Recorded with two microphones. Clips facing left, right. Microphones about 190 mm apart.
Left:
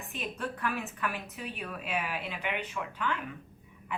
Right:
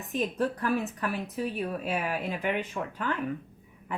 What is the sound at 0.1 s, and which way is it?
A woman's voice, 40° right (ahead or behind).